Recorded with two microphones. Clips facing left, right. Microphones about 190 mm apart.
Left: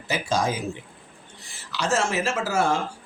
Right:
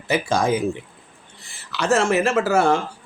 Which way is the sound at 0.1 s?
55° right (ahead or behind).